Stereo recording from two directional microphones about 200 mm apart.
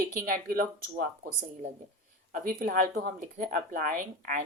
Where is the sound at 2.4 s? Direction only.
45° right (ahead or behind).